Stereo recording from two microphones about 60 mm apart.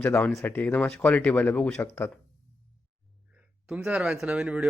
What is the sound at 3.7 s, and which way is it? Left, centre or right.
Speech, centre.